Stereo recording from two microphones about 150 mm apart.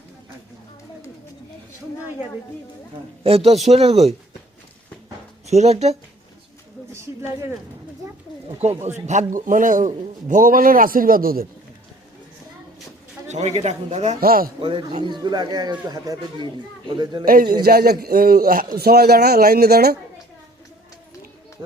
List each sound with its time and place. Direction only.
3.2 s speech: 40° right (ahead or behind)
5.5 s speech: 45° right (ahead or behind)
6.9 s speech: 15° right (ahead or behind)
9.0 s a man's voice: 55° right (ahead or behind); by 11.4 s 75° right (ahead or behind)
13.3 s speech: 45° right (ahead or behind)
14.2 s a man's voice: 75° right (ahead or behind)
14.6 s speech: 35° right (ahead or behind)
17.2 s a man's voice: 80° right
18.8 s speech: 90° right